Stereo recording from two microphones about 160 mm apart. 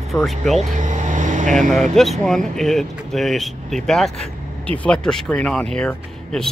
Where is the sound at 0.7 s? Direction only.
50° right (ahead or behind).